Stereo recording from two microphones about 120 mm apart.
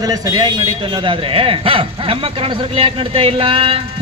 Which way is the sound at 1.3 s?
50° right (ahead or behind).